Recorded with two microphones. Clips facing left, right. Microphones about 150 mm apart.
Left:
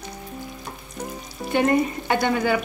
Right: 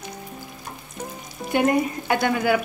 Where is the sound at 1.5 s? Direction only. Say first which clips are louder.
Even; 5° right (ahead or behind).